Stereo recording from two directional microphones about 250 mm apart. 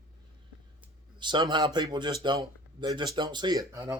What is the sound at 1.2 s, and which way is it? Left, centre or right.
Speech, centre.